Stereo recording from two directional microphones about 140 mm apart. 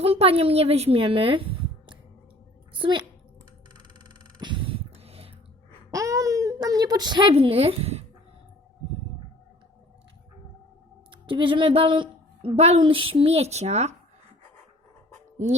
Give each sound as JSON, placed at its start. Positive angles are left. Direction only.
{"t": 0.0, "sound": "a woman's voice", "side_deg": -45}
{"t": 3.9, "sound": "a sound", "side_deg": -35}
{"t": 5.9, "sound": "a child's voice", "side_deg": -25}
{"t": 11.1, "sound": "a woman's voice", "side_deg": -35}